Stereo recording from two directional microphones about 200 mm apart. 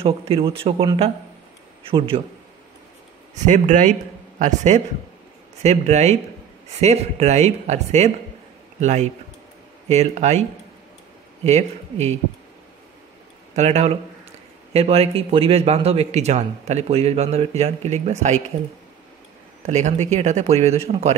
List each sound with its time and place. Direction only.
0.0 s speech: 30° right (ahead or behind)
3.3 s a man's voice: 35° right (ahead or behind)
11.4 s a man's voice: 35° right (ahead or behind)
13.6 s a man's voice: 30° right (ahead or behind)
19.6 s a man's voice: 35° right (ahead or behind)